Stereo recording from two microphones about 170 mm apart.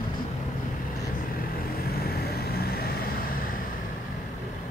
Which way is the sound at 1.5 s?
65° left (ahead or behind).